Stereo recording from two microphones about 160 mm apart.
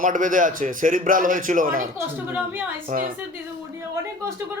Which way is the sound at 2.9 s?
55° right (ahead or behind).